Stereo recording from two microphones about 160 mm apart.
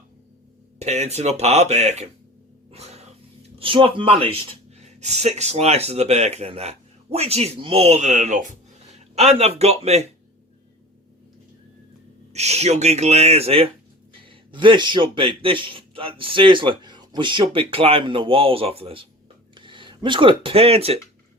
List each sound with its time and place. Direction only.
0.8 s speech: 45° right (ahead or behind)
2.7 s cat: 40° right (ahead or behind)
3.6 s speech: 35° right (ahead or behind); by 8.5 s 50° right (ahead or behind)
9.1 s speech: 40° right (ahead or behind)
12.3 s speech: 45° right (ahead or behind)